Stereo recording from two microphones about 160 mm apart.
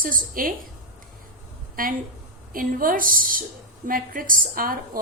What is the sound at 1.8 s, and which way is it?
A woman's voice, 60° right (ahead or behind).